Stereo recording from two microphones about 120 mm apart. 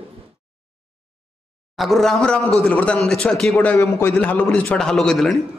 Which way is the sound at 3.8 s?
20° left (ahead or behind).